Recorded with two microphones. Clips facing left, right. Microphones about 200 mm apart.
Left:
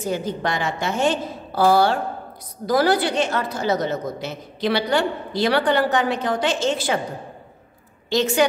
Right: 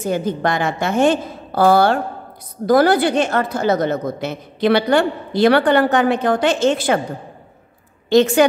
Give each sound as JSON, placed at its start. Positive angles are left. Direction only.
{"t": 0.1, "sound": "a woman's voice", "side_deg": -55}
{"t": 8.1, "sound": "a woman's voice", "side_deg": -55}